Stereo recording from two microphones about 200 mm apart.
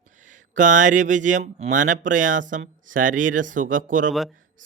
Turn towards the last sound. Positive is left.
turn(degrees=-40)  # may be behind; listen again after turning